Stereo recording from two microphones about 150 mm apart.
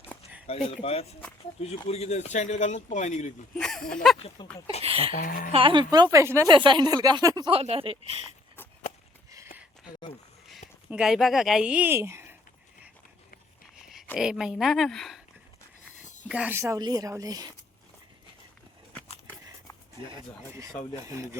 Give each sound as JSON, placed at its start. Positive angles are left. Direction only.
{"t": 0.4, "sound": "speech", "side_deg": 40}
{"t": 3.6, "sound": "a woman's voice", "side_deg": 5}
{"t": 4.4, "sound": "speech", "side_deg": 30}
{"t": 4.8, "sound": "speech", "side_deg": -40}
{"t": 5.1, "sound": "a woman's voice", "side_deg": 65}
{"t": 5.5, "sound": "speech", "side_deg": -40}
{"t": 6.5, "sound": "speech", "side_deg": -30}
{"t": 7.5, "sound": "speech", "side_deg": -40}
{"t": 10.8, "sound": "speech", "side_deg": -5}
{"t": 14.2, "sound": "a woman's voice", "side_deg": -5}
{"t": 16.3, "sound": "speech", "side_deg": -10}
{"t": 16.6, "sound": "speech", "side_deg": -20}